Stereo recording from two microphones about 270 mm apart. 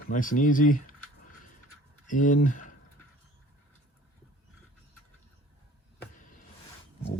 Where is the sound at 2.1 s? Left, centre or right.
Left.